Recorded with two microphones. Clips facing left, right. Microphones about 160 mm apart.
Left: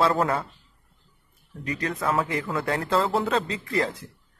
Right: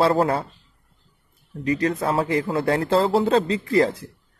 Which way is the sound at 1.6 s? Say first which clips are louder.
Right 7 dB; 30° right (ahead or behind).